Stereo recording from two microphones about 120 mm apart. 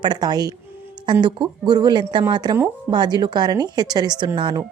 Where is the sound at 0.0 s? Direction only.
35° right (ahead or behind).